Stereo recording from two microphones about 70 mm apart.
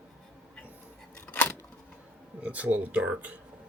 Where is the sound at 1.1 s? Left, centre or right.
Centre.